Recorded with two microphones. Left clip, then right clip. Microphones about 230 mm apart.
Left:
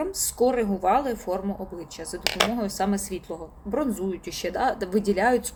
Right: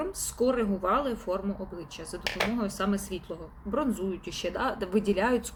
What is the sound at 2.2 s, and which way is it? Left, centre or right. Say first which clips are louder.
Speech: left 6 dB; left.